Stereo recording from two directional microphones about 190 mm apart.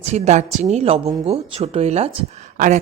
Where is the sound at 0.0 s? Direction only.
35° right (ahead or behind).